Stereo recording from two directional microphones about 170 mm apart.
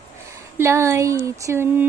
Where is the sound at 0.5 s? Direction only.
15° right (ahead or behind).